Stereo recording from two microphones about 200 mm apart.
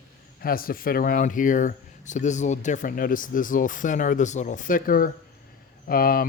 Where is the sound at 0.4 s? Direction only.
45° left (ahead or behind).